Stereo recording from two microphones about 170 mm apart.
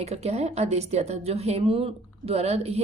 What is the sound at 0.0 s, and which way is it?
A woman's voice, 40° right (ahead or behind).